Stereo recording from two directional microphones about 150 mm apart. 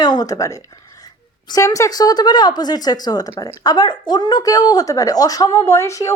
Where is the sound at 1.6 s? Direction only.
20° left (ahead or behind).